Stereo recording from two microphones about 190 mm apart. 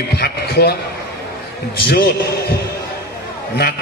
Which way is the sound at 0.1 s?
55° left (ahead or behind).